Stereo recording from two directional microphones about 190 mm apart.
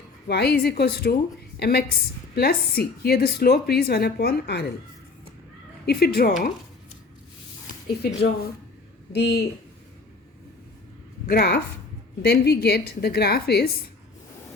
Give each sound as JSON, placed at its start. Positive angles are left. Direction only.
{"t": 0.3, "sound": "a woman's voice", "side_deg": 55}
{"t": 5.8, "sound": "speech", "side_deg": 55}
{"t": 8.0, "sound": "a woman's voice", "side_deg": 55}
{"t": 11.3, "sound": "a woman's voice", "side_deg": 60}